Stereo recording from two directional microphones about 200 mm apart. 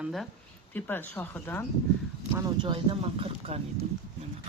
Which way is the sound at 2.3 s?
20° right (ahead or behind).